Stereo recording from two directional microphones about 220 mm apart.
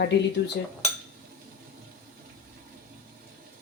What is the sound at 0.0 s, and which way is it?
Cutlery, 50° left (ahead or behind).